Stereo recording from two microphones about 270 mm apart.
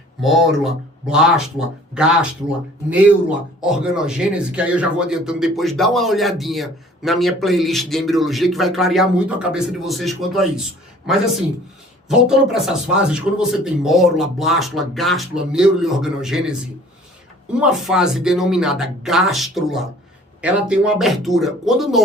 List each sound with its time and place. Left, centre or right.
0.2 s a man's voice: centre
12.0 s a man's voice: centre